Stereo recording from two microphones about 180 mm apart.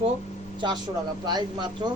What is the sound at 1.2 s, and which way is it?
Speech, 25° right (ahead or behind).